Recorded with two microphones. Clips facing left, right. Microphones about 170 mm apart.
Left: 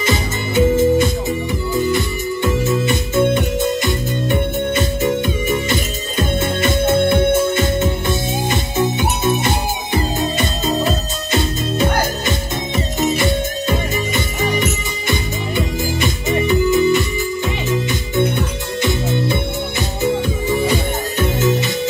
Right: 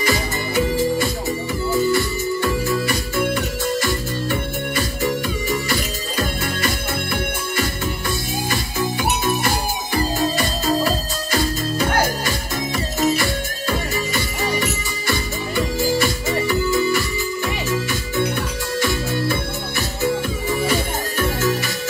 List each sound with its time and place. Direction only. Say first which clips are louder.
0.0 s music: left 2 dB; 20° left (ahead or behind)
18.8 s music: left 3 dB; 20° left (ahead or behind)